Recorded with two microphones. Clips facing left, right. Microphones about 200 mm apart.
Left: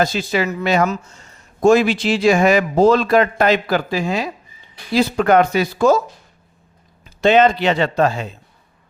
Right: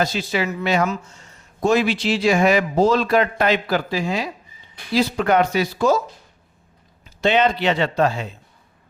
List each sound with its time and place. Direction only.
0.0 s speech: 45° left (ahead or behind)
7.2 s speech: 45° left (ahead or behind)